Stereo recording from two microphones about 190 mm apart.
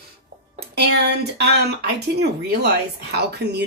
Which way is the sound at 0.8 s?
60° right (ahead or behind).